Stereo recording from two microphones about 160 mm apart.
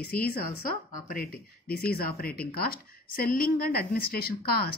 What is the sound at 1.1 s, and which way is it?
Speech, 70° left (ahead or behind).